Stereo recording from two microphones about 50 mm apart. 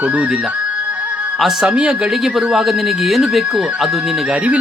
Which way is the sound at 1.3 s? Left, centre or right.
Centre.